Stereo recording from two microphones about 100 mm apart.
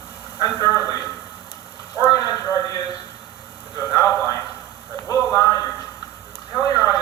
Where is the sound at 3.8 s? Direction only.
30° left (ahead or behind).